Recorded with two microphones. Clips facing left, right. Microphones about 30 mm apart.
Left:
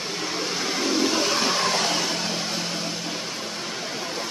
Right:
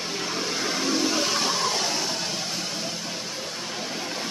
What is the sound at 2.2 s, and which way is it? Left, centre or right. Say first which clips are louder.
Music: left 2 dB; left.